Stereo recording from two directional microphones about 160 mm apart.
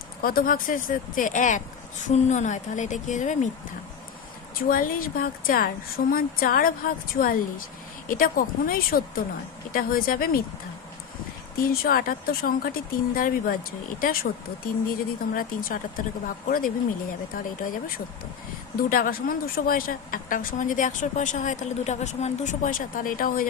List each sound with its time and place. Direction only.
0.2 s a woman's voice: 65° left (ahead or behind); by 3.5 s 50° left (ahead or behind)
4.7 s a woman's voice: 60° left (ahead or behind)
11.5 s speech: 70° left (ahead or behind)
13.1 s a woman's voice: 60° left (ahead or behind)